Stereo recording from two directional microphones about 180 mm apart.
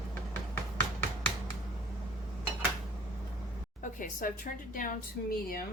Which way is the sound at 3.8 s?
50° left (ahead or behind).